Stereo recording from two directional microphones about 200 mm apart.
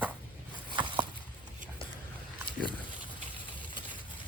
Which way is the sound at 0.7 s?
25° right (ahead or behind).